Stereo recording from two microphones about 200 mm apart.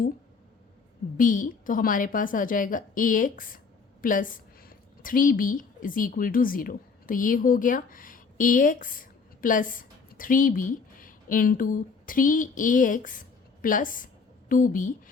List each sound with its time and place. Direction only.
1.1 s a woman's voice: 40° left (ahead or behind)